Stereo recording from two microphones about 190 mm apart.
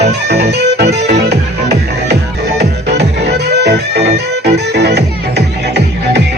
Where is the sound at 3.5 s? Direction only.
60° right (ahead or behind).